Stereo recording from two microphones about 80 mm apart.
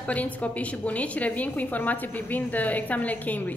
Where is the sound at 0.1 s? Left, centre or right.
Centre.